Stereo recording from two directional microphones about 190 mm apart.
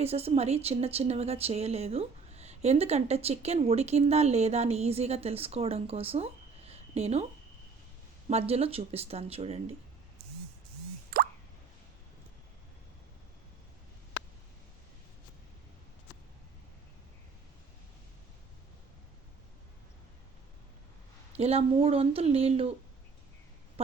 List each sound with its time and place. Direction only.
0.0 s a woman's voice: 30° right (ahead or behind)
8.3 s a woman's voice: 35° right (ahead or behind)
11.1 s plop: 55° right (ahead or behind)
21.3 s a woman's voice: 30° right (ahead or behind)